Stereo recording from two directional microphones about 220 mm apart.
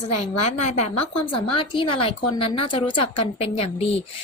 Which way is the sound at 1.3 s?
25° left (ahead or behind).